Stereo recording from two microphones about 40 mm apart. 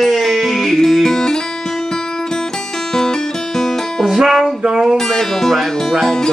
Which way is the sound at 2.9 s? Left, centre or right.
Centre.